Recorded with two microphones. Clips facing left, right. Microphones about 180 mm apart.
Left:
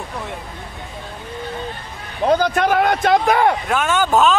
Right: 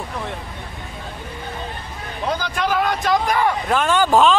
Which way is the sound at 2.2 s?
55° left (ahead or behind).